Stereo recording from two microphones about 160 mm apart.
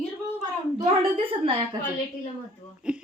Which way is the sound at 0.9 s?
35° right (ahead or behind).